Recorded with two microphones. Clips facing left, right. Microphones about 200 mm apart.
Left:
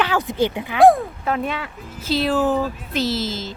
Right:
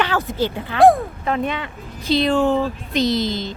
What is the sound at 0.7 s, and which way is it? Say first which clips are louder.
A woman's voice: even; centre (ahead or behind).